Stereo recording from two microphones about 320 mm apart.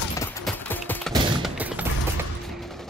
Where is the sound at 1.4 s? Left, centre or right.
Centre.